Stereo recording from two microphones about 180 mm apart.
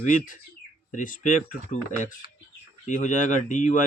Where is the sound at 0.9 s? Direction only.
45° left (ahead or behind).